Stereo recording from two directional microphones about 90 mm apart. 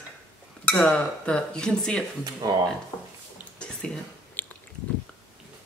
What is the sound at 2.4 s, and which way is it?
Speech, 45° right (ahead or behind).